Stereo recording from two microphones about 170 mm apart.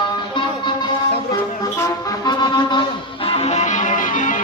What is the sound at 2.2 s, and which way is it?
Music, 25° left (ahead or behind).